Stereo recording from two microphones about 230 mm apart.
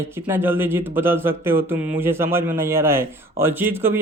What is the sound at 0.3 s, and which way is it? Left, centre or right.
A man's voice, centre.